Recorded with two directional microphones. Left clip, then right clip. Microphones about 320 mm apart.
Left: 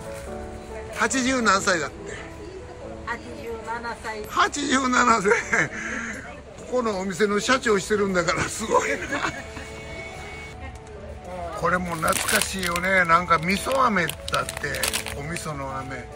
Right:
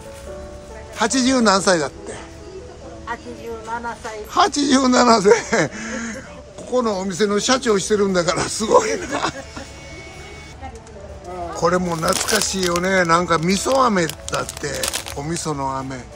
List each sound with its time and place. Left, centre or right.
1.0 s speech: centre
4.3 s speech: centre
11.6 s speech: centre